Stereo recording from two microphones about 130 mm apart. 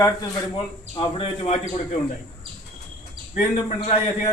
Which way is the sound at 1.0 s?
40° left (ahead or behind).